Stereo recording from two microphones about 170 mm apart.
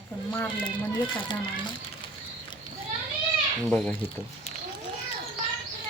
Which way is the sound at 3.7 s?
5° left (ahead or behind).